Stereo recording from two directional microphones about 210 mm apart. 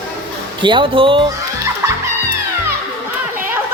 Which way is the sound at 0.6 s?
25° right (ahead or behind).